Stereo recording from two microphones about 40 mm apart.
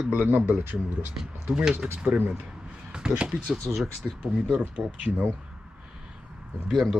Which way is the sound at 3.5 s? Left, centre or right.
Centre.